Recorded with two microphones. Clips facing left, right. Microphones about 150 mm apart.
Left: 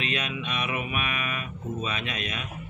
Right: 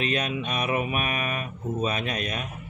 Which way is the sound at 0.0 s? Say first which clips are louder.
Right 4 dB; 35° right (ahead or behind).